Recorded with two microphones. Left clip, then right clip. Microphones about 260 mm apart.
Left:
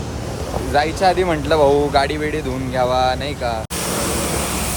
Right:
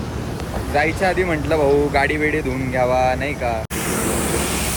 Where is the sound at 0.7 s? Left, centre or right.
Centre.